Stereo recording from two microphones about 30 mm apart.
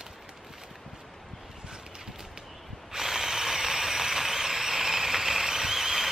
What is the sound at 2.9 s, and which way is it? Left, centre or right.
Drill, centre.